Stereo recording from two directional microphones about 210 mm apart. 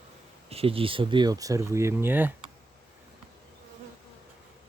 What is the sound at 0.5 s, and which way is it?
Speech, 25° right (ahead or behind).